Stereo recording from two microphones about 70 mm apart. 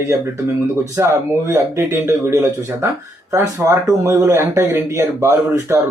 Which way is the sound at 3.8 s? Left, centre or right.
Right.